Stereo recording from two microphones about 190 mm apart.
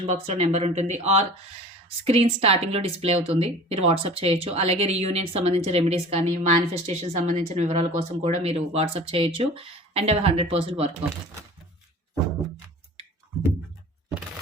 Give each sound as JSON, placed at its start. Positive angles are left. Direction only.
{"t": 0.0, "sound": "speech", "side_deg": -30}